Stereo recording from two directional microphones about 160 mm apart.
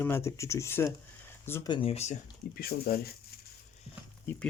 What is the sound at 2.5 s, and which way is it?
Speech, 75° left (ahead or behind).